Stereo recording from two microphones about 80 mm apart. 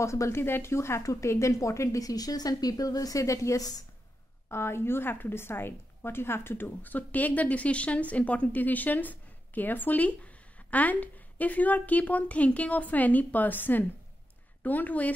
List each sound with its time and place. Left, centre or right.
0.0 s speech: left
4.5 s a woman's voice: left